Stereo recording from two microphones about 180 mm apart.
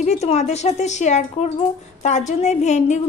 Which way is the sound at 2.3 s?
40° left (ahead or behind).